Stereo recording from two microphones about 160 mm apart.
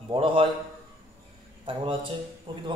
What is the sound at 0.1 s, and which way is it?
Speech, 35° right (ahead or behind).